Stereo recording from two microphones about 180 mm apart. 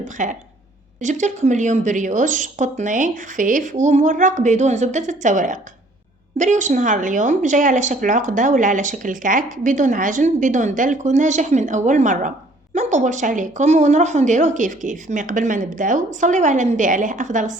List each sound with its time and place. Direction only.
0.0 s a woman's voice: 45° right (ahead or behind)